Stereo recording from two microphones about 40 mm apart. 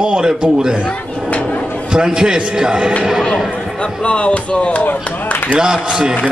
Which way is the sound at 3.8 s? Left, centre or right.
Left.